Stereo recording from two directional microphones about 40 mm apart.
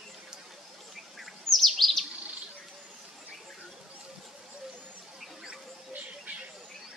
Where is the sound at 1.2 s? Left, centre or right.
Centre.